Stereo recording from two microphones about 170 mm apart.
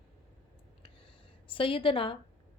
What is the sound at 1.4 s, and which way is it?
Speech, 30° left (ahead or behind).